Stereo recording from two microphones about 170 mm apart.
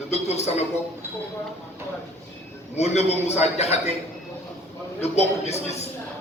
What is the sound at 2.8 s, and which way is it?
A man's voice, 40° left (ahead or behind).